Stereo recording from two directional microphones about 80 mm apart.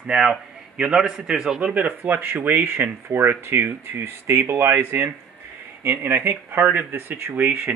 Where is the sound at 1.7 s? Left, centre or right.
Right.